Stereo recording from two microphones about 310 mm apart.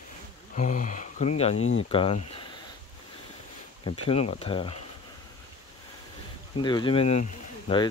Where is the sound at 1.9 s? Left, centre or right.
Centre.